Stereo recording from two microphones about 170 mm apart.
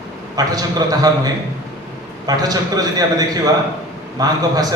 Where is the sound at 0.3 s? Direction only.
20° right (ahead or behind).